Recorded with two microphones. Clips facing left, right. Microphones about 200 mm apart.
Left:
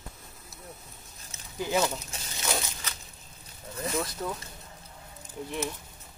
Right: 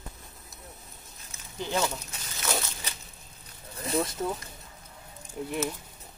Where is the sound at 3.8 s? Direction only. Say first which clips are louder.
Right 3 dB; 30° right (ahead or behind).